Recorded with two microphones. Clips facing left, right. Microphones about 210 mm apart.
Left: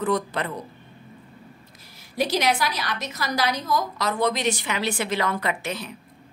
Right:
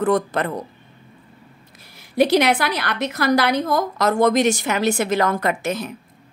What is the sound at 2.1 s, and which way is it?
Speech, 60° right (ahead or behind).